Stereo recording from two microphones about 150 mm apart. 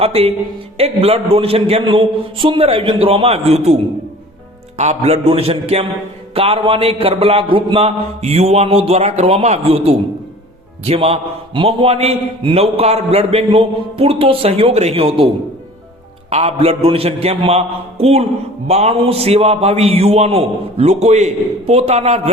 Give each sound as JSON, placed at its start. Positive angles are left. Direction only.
{"t": 0.0, "sound": "a man's voice", "side_deg": -40}
{"t": 4.8, "sound": "a man's voice", "side_deg": -45}
{"t": 16.3, "sound": "a man's voice", "side_deg": -40}